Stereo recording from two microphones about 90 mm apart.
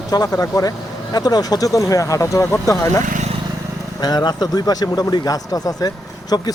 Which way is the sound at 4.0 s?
50° left (ahead or behind).